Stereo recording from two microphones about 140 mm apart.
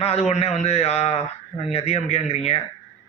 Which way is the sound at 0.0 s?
45° left (ahead or behind).